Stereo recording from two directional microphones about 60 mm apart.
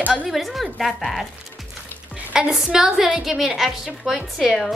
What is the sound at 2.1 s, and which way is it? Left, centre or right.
A woman's voice, centre.